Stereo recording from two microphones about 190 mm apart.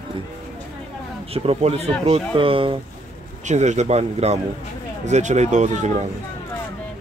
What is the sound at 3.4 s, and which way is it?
Speech, 40° right (ahead or behind).